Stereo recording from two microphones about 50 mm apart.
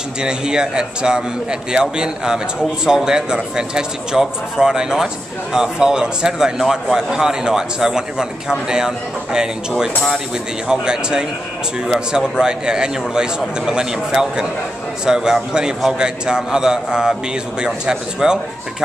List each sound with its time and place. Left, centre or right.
0.2 s a man's voice: centre